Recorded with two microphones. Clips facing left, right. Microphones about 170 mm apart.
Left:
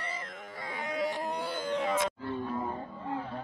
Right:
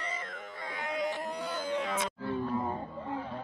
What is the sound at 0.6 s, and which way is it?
Music, 10° left (ahead or behind).